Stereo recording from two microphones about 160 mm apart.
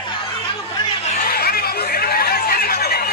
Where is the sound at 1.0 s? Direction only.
55° left (ahead or behind).